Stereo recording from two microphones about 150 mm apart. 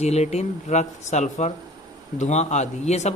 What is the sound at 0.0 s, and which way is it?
Speech, 45° left (ahead or behind).